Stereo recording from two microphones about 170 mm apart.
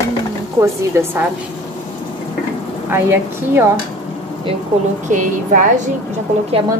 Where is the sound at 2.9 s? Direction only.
15° right (ahead or behind).